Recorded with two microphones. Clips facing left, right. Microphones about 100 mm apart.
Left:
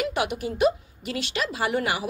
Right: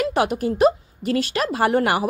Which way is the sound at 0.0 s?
40° right (ahead or behind).